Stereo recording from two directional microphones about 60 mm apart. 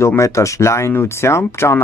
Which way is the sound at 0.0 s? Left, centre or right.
Left.